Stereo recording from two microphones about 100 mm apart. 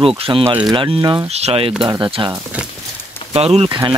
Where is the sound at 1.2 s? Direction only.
90° right.